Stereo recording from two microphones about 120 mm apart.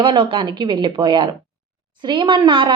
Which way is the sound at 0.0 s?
45° right (ahead or behind).